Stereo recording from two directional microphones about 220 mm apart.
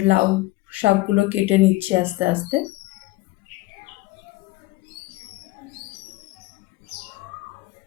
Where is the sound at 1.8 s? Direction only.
10° right (ahead or behind).